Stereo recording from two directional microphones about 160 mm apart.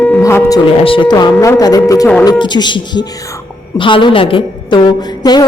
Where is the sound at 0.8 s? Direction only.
35° left (ahead or behind).